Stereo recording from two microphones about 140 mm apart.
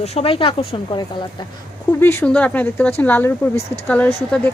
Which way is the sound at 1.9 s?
15° left (ahead or behind).